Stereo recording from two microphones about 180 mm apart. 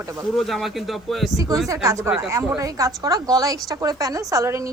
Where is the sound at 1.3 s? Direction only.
20° right (ahead or behind).